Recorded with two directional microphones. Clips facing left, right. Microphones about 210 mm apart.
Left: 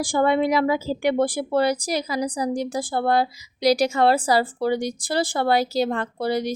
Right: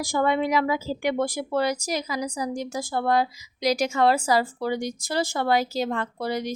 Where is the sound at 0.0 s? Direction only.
30° left (ahead or behind).